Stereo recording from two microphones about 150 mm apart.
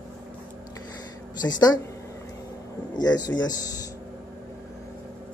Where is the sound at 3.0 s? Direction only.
25° left (ahead or behind).